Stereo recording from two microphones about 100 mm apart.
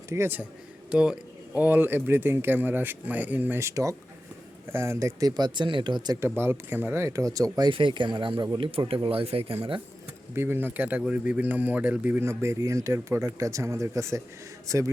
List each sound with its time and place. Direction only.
0.1 s speech: 20° right (ahead or behind)
0.9 s speech: 10° right (ahead or behind); by 5.3 s 30° right (ahead or behind)
5.4 s speech: 50° right (ahead or behind)
6.1 s speech: 25° right (ahead or behind); by 7.7 s 40° right (ahead or behind)
7.7 s speech: 55° right (ahead or behind)
10.3 s a man's voice: 25° right (ahead or behind)
12.2 s speech: 30° right (ahead or behind)